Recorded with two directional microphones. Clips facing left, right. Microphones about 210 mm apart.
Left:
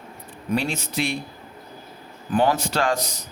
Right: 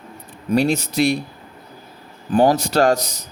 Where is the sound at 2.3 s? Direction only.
40° right (ahead or behind).